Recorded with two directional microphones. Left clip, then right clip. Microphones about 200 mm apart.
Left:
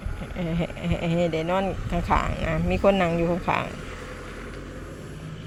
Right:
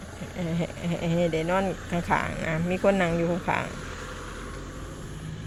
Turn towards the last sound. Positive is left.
turn(degrees=10)  # may be behind; listen again after turning